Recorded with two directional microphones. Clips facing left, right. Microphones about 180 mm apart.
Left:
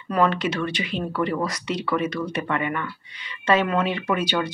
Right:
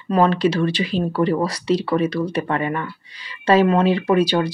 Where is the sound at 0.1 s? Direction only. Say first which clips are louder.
Right 5 dB; 30° right (ahead or behind).